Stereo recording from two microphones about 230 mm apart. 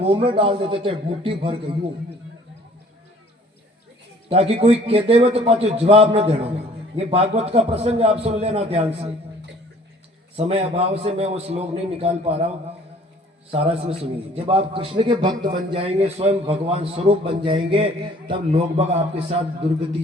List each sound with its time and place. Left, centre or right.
0.0 s a man's voice: right
4.3 s a man's voice: right
10.3 s a man's voice: right